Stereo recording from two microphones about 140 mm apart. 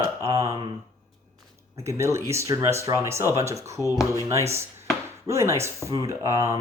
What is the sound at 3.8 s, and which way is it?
Speech, 25° left (ahead or behind).